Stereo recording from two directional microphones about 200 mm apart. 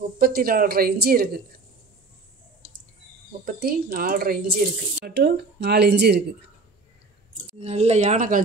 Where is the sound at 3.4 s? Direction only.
50° right (ahead or behind).